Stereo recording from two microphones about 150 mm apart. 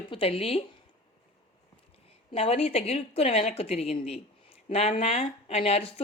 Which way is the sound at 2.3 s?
40° left (ahead or behind).